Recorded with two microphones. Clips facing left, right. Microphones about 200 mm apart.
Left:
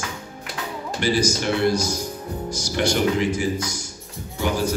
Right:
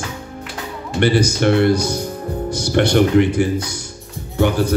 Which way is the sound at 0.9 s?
60° right (ahead or behind).